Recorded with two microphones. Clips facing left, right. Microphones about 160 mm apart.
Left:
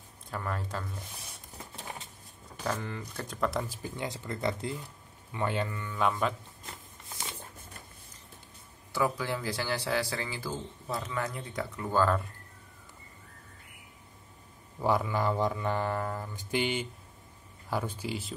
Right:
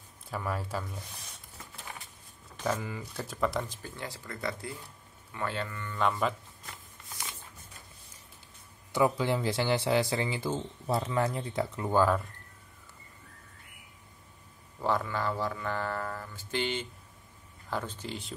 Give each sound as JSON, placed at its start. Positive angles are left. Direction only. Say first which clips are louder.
{"t": 0.3, "sound": "speech", "louder": "right 2 dB", "side_deg": -5}
{"t": 2.6, "sound": "speech", "louder": "right 2 dB", "side_deg": -10}
{"t": 6.6, "sound": "a sound", "louder": "left 2 dB", "side_deg": 25}
{"t": 8.9, "sound": "speech", "louder": "right 4 dB", "side_deg": -20}
{"t": 14.8, "sound": "speech", "louder": "left 2 dB", "side_deg": 10}